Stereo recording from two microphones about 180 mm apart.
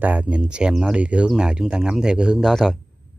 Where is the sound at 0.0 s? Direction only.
10° right (ahead or behind).